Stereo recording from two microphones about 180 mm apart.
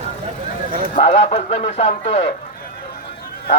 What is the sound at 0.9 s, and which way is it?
Speech, 35° left (ahead or behind).